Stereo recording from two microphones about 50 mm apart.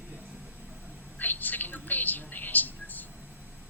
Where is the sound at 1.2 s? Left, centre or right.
Left.